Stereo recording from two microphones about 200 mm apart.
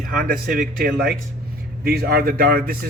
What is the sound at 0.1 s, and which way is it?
Speech, 45° right (ahead or behind).